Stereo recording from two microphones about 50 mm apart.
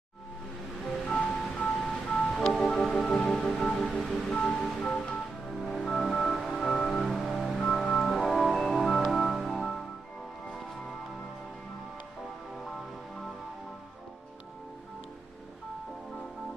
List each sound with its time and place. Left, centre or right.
1.0 s music: centre
2.4 s music: centre
5.5 s music: centre
7.3 s organ: centre